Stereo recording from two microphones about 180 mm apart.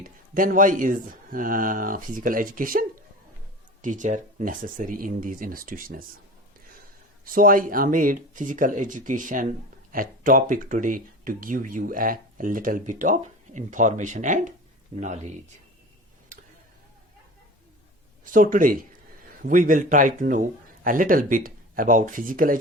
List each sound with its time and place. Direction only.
0.0 s speech: 50° right (ahead or behind)
7.3 s speech: 50° right (ahead or behind)
16.3 s a sound: 50° right (ahead or behind)
18.3 s speech: 50° right (ahead or behind)